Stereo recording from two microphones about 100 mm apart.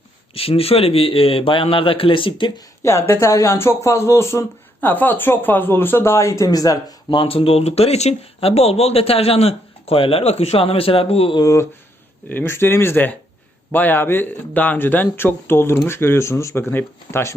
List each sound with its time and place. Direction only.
0.3 s speech: 75° left (ahead or behind); by 2.5 s 60° left (ahead or behind)
2.8 s speech: 30° left (ahead or behind)
7.1 s speech: 65° left (ahead or behind)
11.3 s speech: 30° left (ahead or behind)
12.3 s speech: 20° left (ahead or behind)